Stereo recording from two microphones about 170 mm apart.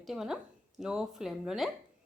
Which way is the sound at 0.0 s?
Centre (ahead or behind).